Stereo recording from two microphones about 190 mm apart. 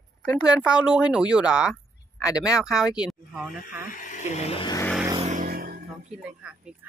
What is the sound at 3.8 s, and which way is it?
Speech, 45° left (ahead or behind).